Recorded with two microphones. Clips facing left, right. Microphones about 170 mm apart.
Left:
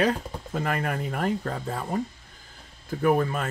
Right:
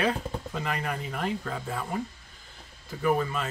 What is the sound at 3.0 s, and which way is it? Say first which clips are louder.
Speech: left 3 dB; 50° left (ahead or behind).